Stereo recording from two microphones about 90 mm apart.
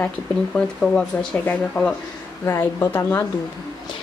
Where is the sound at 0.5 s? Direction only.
10° left (ahead or behind).